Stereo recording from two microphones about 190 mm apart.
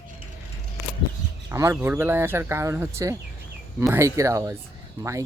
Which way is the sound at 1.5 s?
15° right (ahead or behind).